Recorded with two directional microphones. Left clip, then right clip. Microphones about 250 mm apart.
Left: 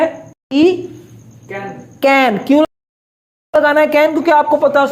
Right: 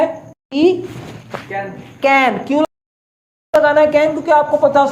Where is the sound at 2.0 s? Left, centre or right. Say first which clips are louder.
Left 1 dB; left.